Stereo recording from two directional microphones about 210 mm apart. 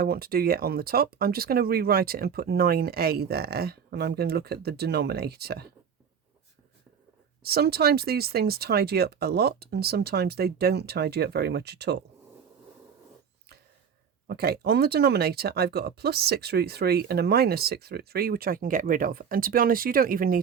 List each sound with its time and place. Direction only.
0.0 s speech: 45° right (ahead or behind)
7.4 s speech: 50° right (ahead or behind)
14.3 s speech: 50° right (ahead or behind)